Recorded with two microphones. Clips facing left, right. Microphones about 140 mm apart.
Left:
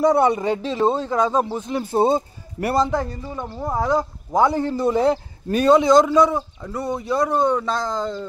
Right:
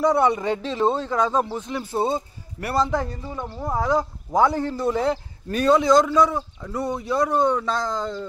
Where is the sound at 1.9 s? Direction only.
40° left (ahead or behind).